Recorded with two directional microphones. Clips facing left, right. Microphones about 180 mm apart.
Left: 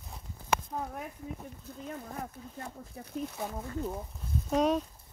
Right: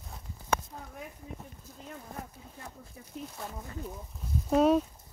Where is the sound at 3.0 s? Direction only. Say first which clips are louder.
Left 5 dB; 50° left (ahead or behind).